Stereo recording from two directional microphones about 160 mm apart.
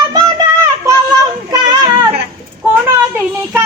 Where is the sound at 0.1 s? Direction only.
25° right (ahead or behind).